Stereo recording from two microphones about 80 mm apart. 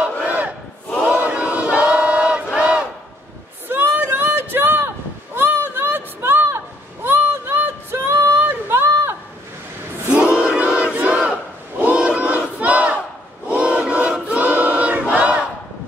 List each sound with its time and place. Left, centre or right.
0.0 s battle cry: centre
3.6 s a sound: right
10.1 s crowd: centre
11.8 s battle cry: centre
13.5 s choir: centre